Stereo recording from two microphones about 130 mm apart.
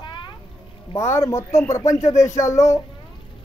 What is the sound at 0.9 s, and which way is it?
Speech, 20° left (ahead or behind).